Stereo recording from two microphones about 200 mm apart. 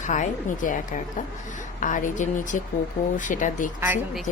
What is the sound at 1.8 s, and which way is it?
A woman's voice, 40° left (ahead or behind).